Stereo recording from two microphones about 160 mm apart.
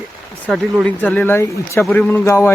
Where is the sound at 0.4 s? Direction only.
Centre (ahead or behind).